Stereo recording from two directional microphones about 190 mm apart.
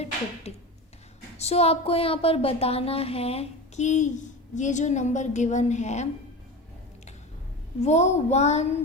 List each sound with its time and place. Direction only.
0.5 s a sound: 35° left (ahead or behind)
1.4 s a woman's voice: 35° left (ahead or behind)
7.8 s a woman's voice: 35° left (ahead or behind)